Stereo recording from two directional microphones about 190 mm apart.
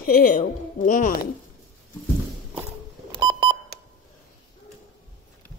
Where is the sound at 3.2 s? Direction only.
20° right (ahead or behind).